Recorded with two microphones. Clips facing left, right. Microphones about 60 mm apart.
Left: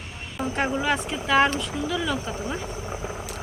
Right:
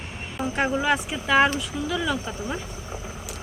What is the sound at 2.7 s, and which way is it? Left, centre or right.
Vehicle, left.